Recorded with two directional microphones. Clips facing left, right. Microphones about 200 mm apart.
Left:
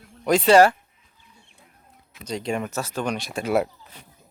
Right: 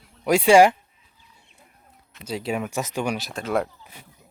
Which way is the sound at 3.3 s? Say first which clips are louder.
Left 2 dB; 10° left (ahead or behind).